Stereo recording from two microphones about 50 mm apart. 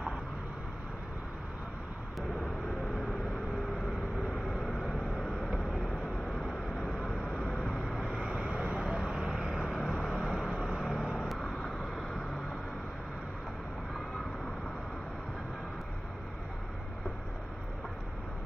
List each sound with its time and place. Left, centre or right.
4.2 s vehicle: centre
8.1 s vehicle: centre
9.1 s vehicle: centre
9.7 s vehicle: centre